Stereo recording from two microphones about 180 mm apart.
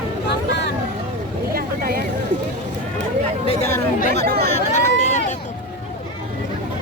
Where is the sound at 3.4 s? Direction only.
35° left (ahead or behind).